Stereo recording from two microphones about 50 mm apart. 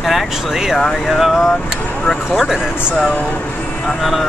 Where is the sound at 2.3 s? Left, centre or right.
Centre.